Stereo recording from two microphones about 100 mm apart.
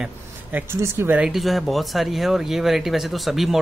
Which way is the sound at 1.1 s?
5° right (ahead or behind).